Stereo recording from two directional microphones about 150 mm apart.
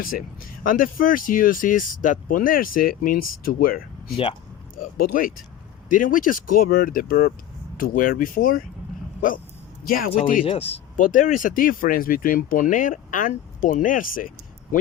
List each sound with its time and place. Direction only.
0.0 s speech: 75° left (ahead or behind)
7.8 s speech: 70° left (ahead or behind)
9.8 s speech: 75° left (ahead or behind)
10.4 s speech: 40° left (ahead or behind)
10.9 s speech: 60° left (ahead or behind)